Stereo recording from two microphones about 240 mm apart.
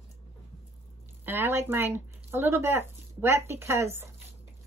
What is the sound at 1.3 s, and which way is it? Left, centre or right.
Speech, centre.